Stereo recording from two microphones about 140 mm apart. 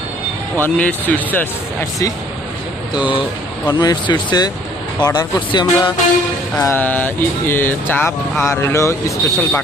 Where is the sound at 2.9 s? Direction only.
35° left (ahead or behind).